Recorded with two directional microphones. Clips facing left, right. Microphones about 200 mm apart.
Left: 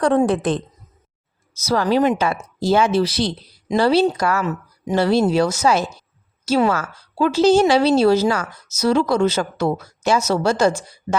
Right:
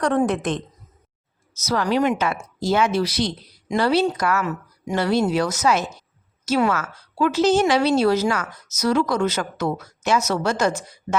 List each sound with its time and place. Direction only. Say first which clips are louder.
0.0 s a woman's voice: left 4 dB; 30° left (ahead or behind)
1.6 s a woman's voice: left 3 dB; 30° left (ahead or behind)